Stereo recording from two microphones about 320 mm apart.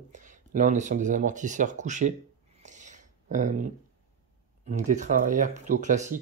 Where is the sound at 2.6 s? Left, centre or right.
Right.